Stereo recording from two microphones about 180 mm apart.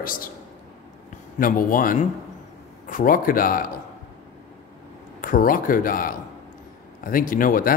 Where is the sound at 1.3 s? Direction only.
50° left (ahead or behind).